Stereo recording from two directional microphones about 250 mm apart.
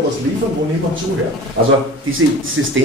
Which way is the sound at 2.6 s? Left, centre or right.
Right.